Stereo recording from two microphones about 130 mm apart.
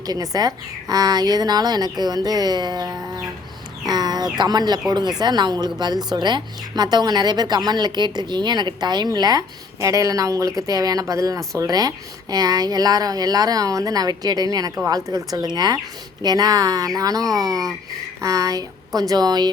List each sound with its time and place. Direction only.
0.0 s a woman's voice: 30° right (ahead or behind)